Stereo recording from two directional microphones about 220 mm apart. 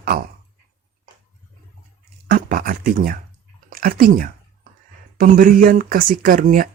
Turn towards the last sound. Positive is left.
turn(degrees=-40)  # may be behind; listen again after turning